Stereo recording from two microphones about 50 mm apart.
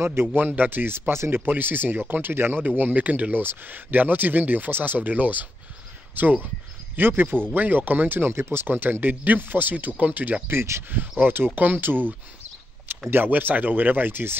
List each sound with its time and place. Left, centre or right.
0.0 s speech: right
0.4 s speech: right
1.4 s speech: right
10.5 s speech: right
10.9 s speech: right
13.1 s speech: right